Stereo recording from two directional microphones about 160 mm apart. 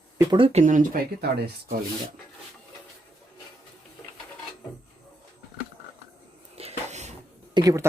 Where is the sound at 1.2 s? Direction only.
90° right.